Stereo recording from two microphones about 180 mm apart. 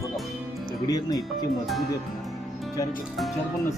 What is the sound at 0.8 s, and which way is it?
Speech, 20° left (ahead or behind).